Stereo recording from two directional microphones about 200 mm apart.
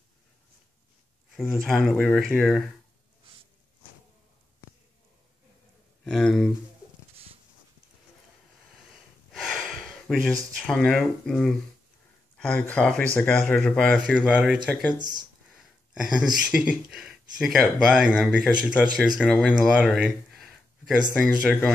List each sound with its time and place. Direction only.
1.3 s speech: centre (ahead or behind)
6.0 s speech: centre (ahead or behind)
9.3 s a sound: centre (ahead or behind)
10.7 s speech: centre (ahead or behind)
15.0 s speech: 20° right (ahead or behind)
15.9 s speech: 5° right (ahead or behind)